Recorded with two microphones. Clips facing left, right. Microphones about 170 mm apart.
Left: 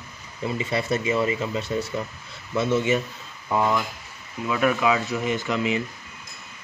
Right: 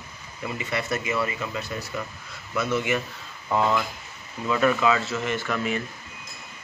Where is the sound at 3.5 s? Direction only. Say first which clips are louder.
Even; 15° left (ahead or behind).